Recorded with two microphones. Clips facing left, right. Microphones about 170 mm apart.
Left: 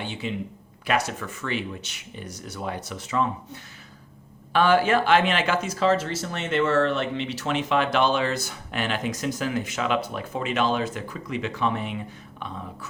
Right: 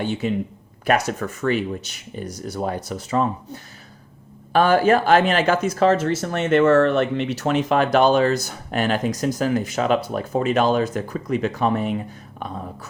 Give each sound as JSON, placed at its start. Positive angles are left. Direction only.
{"t": 0.0, "sound": "speech", "side_deg": -45}